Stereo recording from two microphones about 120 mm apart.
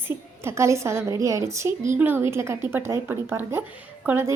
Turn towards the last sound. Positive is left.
turn(degrees=-20)  # may be behind; listen again after turning